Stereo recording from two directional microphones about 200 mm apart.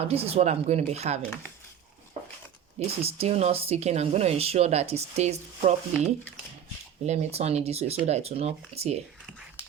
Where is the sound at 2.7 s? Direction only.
30° right (ahead or behind).